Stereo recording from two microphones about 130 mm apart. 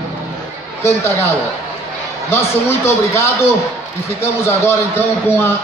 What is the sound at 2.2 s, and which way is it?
A man's voice, 20° left (ahead or behind).